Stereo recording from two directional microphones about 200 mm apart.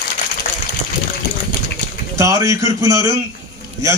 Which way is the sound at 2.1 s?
15° right (ahead or behind).